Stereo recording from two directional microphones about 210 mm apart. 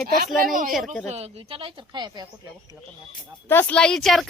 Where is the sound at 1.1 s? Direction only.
30° right (ahead or behind).